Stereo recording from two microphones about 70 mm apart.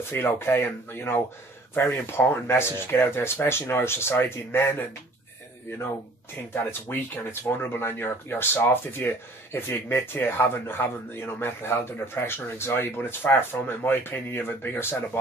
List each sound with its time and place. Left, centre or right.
0.1 s speech: left
6.5 s speech: left